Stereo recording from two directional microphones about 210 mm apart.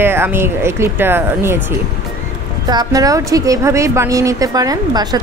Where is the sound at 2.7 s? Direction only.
20° right (ahead or behind).